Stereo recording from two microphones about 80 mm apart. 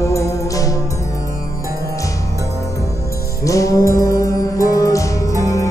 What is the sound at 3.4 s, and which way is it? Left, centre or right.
Music, left.